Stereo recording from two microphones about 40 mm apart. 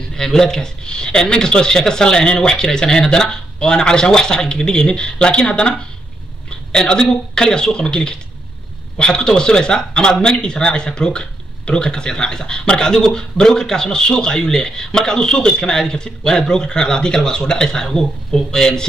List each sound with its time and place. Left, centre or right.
0.1 s speech: centre